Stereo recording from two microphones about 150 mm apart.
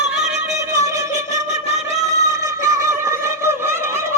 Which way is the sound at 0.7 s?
20° right (ahead or behind).